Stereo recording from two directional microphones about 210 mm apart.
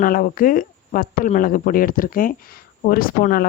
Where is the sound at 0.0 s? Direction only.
40° left (ahead or behind).